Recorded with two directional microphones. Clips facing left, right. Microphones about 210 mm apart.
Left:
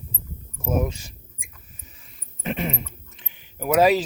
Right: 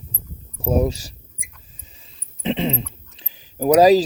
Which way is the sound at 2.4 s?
25° right (ahead or behind).